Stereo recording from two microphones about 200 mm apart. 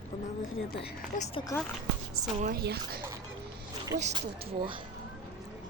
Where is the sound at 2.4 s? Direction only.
50° right (ahead or behind).